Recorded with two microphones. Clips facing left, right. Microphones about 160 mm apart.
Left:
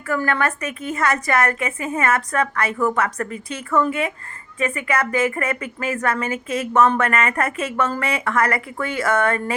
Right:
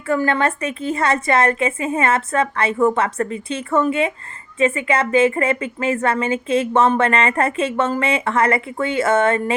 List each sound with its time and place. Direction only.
0.1 s a woman's voice: 25° right (ahead or behind)